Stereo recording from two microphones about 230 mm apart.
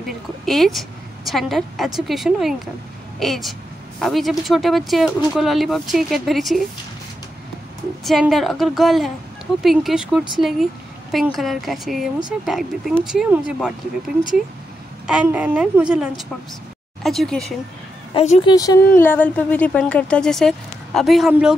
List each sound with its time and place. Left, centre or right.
0.0 s a woman's voice: centre
8.0 s a woman's voice: centre
15.0 s a woman's voice: centre
18.1 s a woman's voice: left
18.5 s a woman's voice: centre